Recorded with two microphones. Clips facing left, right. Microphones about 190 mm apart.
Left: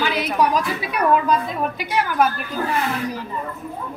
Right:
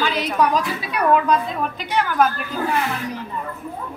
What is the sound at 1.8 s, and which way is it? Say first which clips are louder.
Speech: right 1 dB; 10° left (ahead or behind).